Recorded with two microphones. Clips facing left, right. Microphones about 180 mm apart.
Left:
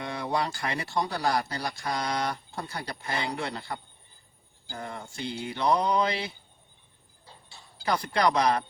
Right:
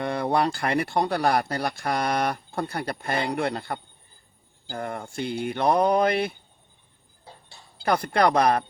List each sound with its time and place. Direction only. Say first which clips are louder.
0.0 s speech: right 6 dB; 60° right (ahead or behind)
7.9 s speech: right 4 dB; 55° right (ahead or behind)